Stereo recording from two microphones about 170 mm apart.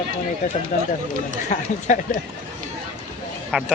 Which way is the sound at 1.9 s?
45° left (ahead or behind).